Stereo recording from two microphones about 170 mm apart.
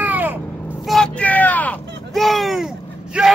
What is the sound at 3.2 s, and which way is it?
Bellow, 5° right (ahead or behind).